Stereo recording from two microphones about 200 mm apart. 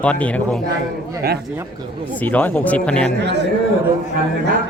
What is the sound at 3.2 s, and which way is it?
Speech, 60° right (ahead or behind).